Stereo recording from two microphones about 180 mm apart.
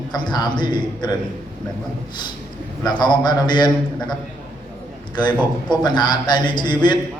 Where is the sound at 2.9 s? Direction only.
25° left (ahead or behind).